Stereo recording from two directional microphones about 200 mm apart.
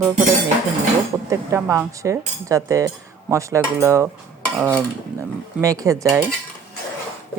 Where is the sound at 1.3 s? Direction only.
15° right (ahead or behind).